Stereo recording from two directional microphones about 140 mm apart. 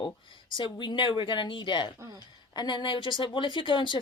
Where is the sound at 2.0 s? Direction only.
25° right (ahead or behind).